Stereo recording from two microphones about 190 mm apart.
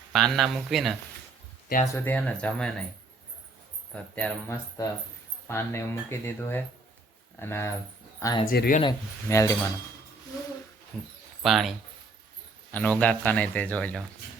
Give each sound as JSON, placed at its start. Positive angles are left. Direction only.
{"t": 0.1, "sound": "speech", "side_deg": 0}
{"t": 1.9, "sound": "speech", "side_deg": 10}
{"t": 4.1, "sound": "speech", "side_deg": 5}
{"t": 8.4, "sound": "speech", "side_deg": 50}
{"t": 8.8, "sound": "speech", "side_deg": 20}
{"t": 11.4, "sound": "speech", "side_deg": 0}
{"t": 12.7, "sound": "speech", "side_deg": 10}